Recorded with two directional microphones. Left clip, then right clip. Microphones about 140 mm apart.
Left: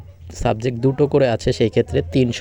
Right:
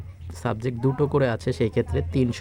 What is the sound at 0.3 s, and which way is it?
Speech, 25° left (ahead or behind).